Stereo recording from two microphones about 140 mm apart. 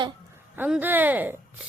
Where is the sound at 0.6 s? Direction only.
10° right (ahead or behind).